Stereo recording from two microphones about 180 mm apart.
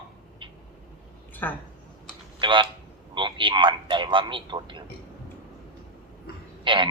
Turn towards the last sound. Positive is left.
turn(degrees=-25)  # may be behind; listen again after turning